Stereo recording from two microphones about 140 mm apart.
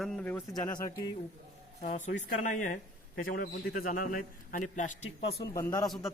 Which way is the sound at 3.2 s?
85° left.